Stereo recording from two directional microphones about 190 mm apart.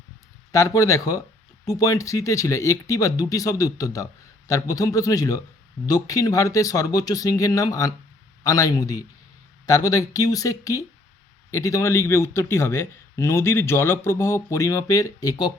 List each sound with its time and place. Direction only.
0.5 s a man's voice: 15° left (ahead or behind)